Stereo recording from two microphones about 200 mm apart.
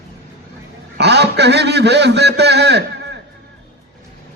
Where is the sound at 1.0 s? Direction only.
55° right (ahead or behind).